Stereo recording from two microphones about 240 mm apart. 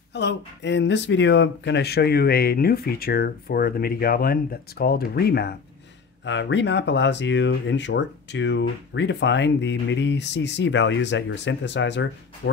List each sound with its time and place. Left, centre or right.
0.1 s speech: left